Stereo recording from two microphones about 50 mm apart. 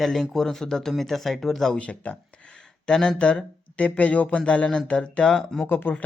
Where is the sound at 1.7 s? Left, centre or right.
Left.